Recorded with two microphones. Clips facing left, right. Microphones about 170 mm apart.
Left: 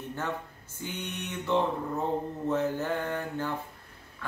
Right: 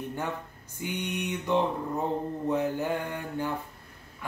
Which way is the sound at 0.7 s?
15° right (ahead or behind).